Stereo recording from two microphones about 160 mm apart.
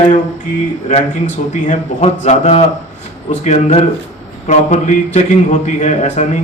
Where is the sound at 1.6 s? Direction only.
50° left (ahead or behind).